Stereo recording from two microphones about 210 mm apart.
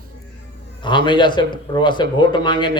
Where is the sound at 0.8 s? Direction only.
20° left (ahead or behind).